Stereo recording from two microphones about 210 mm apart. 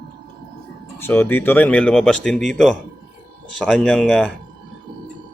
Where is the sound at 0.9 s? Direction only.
10° left (ahead or behind).